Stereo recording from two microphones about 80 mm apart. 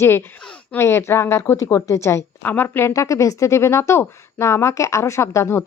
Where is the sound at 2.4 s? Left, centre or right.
Left.